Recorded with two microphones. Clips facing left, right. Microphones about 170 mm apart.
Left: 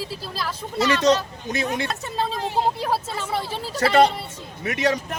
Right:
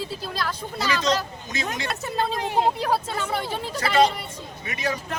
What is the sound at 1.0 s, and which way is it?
Speech, 60° left (ahead or behind).